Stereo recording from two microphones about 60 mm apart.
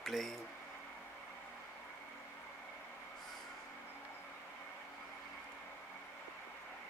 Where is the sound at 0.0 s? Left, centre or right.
Centre.